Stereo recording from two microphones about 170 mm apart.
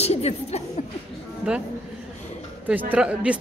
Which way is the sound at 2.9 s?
5° right (ahead or behind).